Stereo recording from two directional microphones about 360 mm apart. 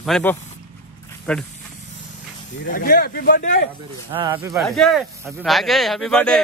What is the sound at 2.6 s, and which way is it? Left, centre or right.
Speech, left.